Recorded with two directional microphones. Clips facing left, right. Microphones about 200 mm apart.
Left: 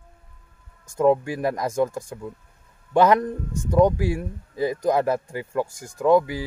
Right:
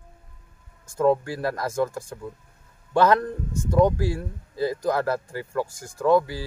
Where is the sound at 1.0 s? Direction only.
15° left (ahead or behind).